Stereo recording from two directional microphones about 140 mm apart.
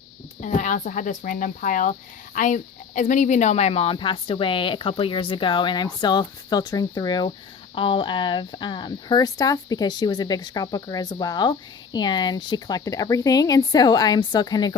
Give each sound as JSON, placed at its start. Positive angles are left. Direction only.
{"t": 0.4, "sound": "speech", "side_deg": 60}